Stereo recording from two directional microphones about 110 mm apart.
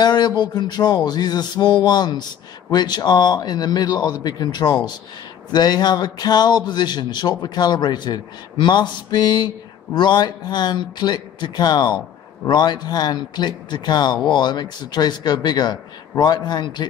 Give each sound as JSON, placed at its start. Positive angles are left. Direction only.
{"t": 0.0, "sound": "speech", "side_deg": 40}